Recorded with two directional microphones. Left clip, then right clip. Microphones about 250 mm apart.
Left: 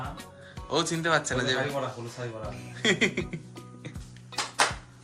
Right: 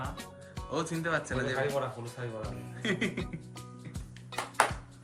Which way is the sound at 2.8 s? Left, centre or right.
Centre.